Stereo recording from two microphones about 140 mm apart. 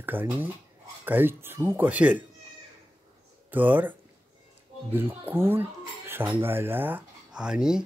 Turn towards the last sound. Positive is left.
turn(degrees=-5)  # may be behind; listen again after turning